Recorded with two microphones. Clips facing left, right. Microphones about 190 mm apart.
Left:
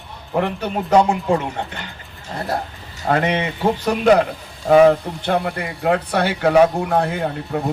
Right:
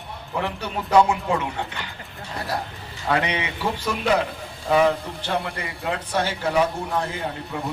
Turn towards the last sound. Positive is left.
turn(degrees=60)  # may be behind; listen again after turning